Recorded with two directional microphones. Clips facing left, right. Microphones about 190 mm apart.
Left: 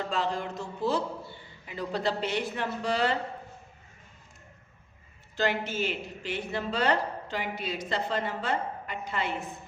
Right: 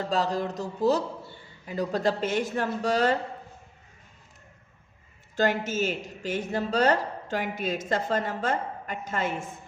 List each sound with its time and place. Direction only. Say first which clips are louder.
0.0 s speech: right 4 dB; 40° right (ahead or behind)
5.4 s speech: right 3 dB; 45° right (ahead or behind)